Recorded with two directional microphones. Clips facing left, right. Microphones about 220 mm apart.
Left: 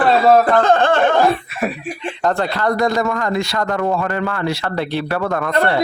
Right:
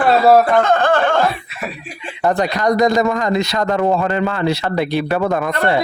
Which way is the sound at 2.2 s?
15° right (ahead or behind).